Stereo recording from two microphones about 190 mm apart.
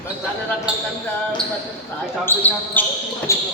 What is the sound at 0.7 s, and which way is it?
Speech, 5° right (ahead or behind).